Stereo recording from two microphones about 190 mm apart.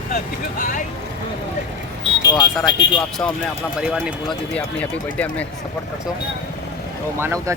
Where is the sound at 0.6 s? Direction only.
40° left (ahead or behind).